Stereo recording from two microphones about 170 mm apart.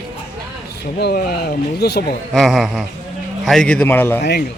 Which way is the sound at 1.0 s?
70° left (ahead or behind).